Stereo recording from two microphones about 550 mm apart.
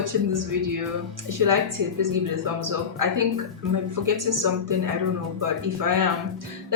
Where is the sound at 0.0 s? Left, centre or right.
Right.